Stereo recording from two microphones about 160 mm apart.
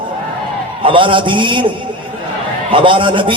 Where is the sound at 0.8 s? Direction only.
30° right (ahead or behind).